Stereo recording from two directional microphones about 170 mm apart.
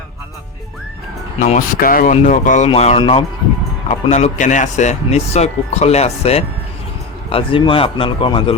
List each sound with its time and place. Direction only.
1.5 s speech: 50° left (ahead or behind)
2.6 s speech: 40° left (ahead or behind)
3.8 s speech: 40° left (ahead or behind)